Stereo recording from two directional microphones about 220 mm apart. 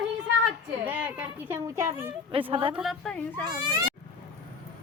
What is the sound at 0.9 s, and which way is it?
Speech, 5° right (ahead or behind).